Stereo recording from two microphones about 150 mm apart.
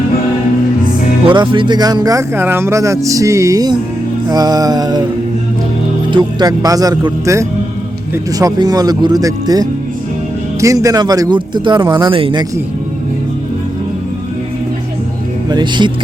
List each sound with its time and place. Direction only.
1.3 s speech: 30° right (ahead or behind)
6.1 s speech: 25° right (ahead or behind)
15.4 s speech: 30° right (ahead or behind)